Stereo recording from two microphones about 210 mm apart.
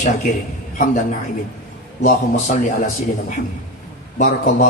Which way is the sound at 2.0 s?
40° left (ahead or behind).